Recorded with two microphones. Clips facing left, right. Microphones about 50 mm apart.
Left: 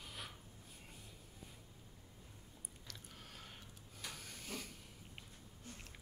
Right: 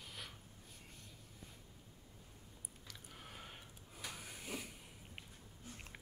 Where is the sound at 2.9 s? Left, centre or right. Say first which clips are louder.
Right 2 dB; centre.